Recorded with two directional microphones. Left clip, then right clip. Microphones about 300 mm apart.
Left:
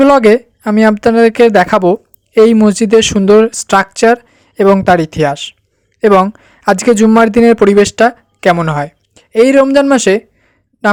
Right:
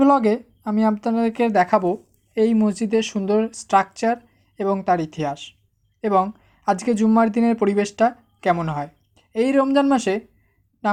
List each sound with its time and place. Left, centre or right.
0.0 s a woman's voice: left